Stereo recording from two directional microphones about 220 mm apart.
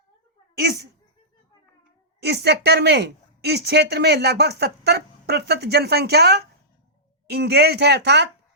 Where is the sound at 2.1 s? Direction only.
50° right (ahead or behind).